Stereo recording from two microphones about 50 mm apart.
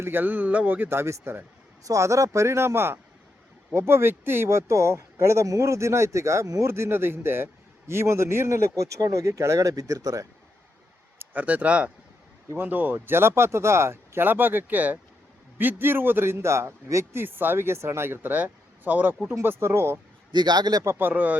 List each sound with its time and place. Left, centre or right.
0.0 s a man's voice: right
0.9 s speech: right
1.9 s speech: right
4.4 s speech: right
11.3 s speech: right
12.5 s speech: right
14.2 s a man's voice: right
15.5 s speech: right
17.2 s speech: right
19.3 s speech: right
20.9 s a man's voice: right